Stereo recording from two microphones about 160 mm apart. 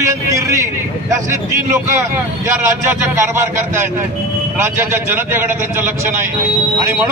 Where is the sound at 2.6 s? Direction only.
15° right (ahead or behind).